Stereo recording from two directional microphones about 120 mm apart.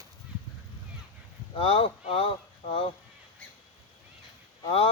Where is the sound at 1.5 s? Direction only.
45° left (ahead or behind).